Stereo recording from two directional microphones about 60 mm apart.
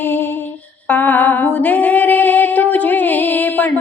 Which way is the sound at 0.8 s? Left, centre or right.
Left.